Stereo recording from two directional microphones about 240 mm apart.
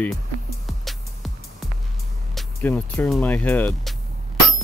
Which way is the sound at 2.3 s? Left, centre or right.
Centre.